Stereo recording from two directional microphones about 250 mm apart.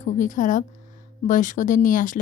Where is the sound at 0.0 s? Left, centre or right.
Left.